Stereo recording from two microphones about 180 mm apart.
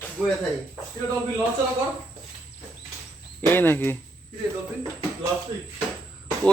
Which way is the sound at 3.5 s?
10° left (ahead or behind).